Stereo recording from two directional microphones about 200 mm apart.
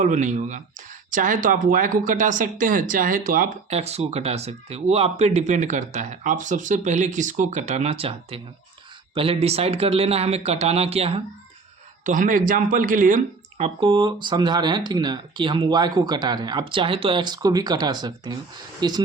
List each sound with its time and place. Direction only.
0.0 s speech: 40° right (ahead or behind)
12.0 s speech: 40° right (ahead or behind)
13.7 s speech: 25° right (ahead or behind)